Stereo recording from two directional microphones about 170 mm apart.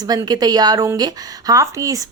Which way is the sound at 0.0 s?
25° right (ahead or behind).